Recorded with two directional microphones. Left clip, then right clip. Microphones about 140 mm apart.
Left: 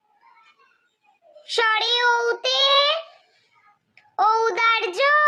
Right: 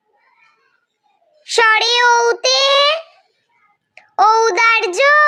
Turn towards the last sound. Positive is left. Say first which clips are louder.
# right 7 dB
turn(degrees=-35)  # may be behind; listen again after turning